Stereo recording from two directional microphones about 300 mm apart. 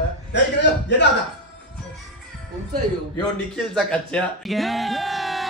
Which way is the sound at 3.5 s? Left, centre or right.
Centre.